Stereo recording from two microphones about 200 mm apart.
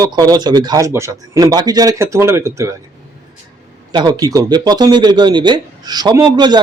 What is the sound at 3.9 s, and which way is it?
Speech, 20° right (ahead or behind).